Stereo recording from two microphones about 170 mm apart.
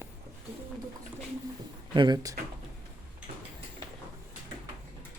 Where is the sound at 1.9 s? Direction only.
25° right (ahead or behind).